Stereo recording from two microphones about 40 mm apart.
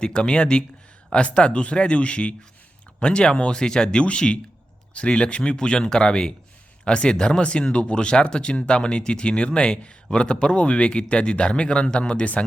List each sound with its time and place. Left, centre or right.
0.0 s speech: left